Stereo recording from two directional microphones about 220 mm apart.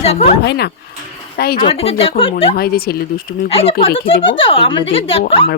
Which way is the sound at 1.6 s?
25° left (ahead or behind).